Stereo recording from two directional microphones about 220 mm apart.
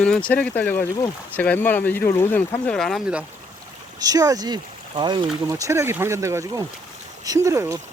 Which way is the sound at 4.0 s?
15° right (ahead or behind).